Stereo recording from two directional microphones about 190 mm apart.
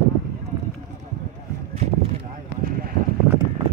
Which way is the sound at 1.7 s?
35° right (ahead or behind).